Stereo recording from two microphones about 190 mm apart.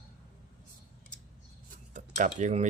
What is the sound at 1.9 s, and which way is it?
Cutlery, 40° right (ahead or behind).